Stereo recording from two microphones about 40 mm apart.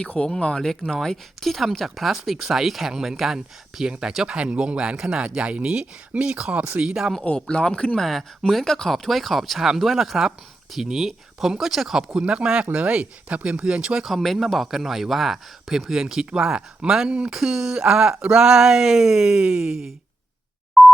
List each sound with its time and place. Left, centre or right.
0.0 s speech: left; by 6.8 s right
6.8 s speech: centre
7.3 s speech: left
7.9 s speech: centre
12.2 s speech: right
14.0 s speech: centre
15.9 s speech: centre
17.4 s speech: centre
17.7 s speech: right
20.8 s dial tone: centre